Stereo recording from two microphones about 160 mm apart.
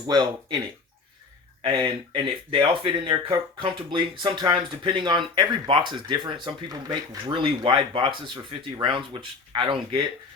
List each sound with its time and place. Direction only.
0.1 s speech: 25° right (ahead or behind)
1.6 s speech: 30° right (ahead or behind)